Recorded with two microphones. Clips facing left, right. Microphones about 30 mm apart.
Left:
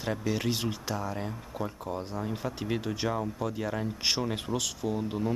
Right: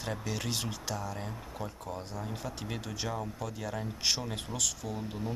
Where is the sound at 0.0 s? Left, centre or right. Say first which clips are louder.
Left 6 dB; centre.